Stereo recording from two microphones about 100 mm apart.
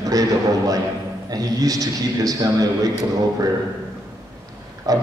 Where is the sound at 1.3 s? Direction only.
35° right (ahead or behind).